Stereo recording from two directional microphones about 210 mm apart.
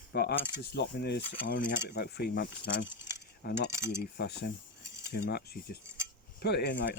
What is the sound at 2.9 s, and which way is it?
Cutlery, 10° right (ahead or behind).